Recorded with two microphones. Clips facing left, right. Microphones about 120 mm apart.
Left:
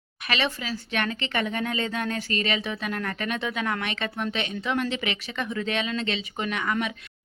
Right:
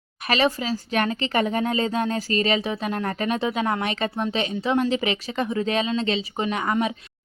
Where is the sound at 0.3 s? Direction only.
40° right (ahead or behind).